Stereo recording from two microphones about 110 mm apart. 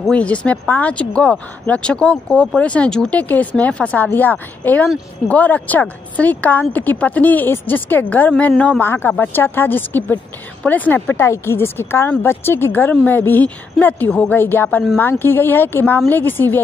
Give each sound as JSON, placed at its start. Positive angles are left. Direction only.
{"t": 0.1, "sound": "a woman's voice", "side_deg": 10}